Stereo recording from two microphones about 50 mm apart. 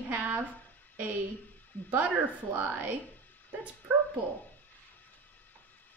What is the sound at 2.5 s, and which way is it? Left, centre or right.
Speech, right.